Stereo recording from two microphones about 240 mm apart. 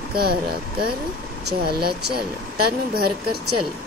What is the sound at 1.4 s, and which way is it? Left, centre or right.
Speech, right.